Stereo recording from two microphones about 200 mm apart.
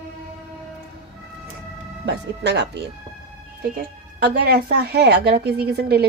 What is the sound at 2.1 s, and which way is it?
Speech, 60° right (ahead or behind).